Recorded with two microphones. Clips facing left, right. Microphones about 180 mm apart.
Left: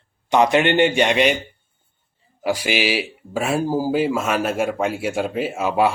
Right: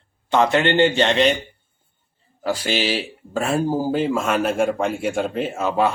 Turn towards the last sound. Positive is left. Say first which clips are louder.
# left 1 dB
turn(degrees=10)  # may be behind; listen again after turning